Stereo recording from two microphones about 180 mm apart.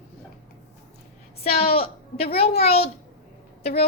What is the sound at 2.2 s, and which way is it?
Speech, 35° left (ahead or behind).